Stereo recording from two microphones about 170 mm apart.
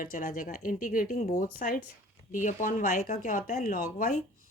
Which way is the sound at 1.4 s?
60° left (ahead or behind).